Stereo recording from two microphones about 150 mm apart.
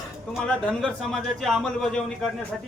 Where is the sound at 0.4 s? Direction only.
5° left (ahead or behind).